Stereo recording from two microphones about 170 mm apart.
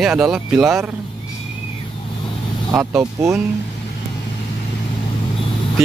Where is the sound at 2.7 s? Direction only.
15° right (ahead or behind).